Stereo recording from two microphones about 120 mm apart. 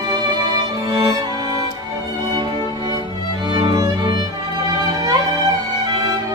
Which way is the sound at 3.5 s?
35° right (ahead or behind).